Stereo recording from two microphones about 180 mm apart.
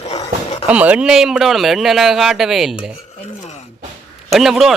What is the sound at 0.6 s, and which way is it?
Speech, 5° right (ahead or behind).